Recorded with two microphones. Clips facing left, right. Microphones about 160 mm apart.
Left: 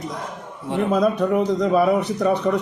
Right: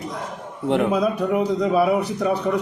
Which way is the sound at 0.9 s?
10° right (ahead or behind).